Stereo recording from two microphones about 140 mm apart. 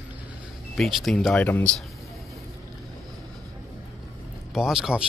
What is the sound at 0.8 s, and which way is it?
Speech, centre (ahead or behind).